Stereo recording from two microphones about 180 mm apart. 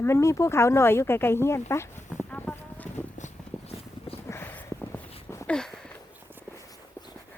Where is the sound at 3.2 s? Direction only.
35° left (ahead or behind).